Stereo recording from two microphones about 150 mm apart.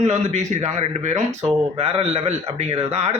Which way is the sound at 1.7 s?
40° right (ahead or behind).